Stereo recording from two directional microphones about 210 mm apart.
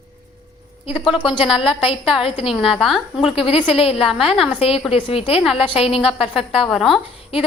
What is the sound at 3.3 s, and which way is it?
Speech, 25° left (ahead or behind).